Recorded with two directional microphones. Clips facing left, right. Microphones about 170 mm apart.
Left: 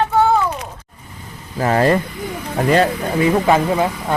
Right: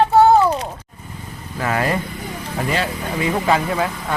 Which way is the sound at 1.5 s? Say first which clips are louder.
Left 6 dB; 35° left (ahead or behind).